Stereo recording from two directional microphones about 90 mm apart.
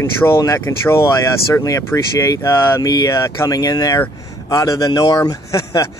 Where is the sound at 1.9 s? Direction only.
15° left (ahead or behind).